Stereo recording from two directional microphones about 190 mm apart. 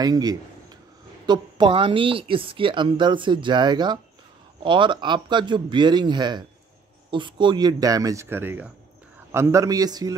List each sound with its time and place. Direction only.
0.0 s a man's voice: 20° right (ahead or behind)